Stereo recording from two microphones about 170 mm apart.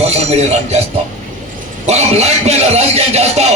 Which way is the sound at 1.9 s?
40° right (ahead or behind).